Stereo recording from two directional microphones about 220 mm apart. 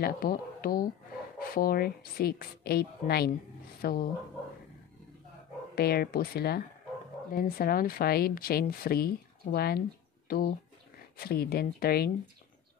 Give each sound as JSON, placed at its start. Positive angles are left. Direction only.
{"t": 0.0, "sound": "speech", "side_deg": 40}
{"t": 5.8, "sound": "speech", "side_deg": 45}